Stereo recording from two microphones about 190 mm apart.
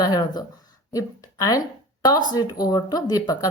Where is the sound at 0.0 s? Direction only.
20° left (ahead or behind).